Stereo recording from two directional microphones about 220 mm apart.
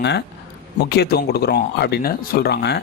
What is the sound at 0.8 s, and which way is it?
Speech, 45° left (ahead or behind).